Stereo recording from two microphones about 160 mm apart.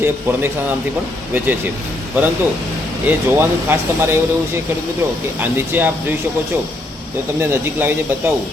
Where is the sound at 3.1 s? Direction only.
15° right (ahead or behind).